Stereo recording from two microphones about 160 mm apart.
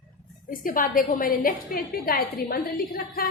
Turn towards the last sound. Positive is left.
turn(degrees=65)  # may be behind; listen again after turning